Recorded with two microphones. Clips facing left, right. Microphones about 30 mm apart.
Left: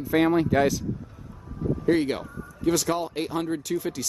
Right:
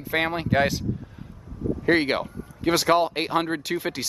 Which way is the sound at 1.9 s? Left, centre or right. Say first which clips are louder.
Right 2 dB; right.